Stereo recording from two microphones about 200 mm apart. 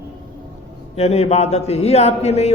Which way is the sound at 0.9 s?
35° left (ahead or behind).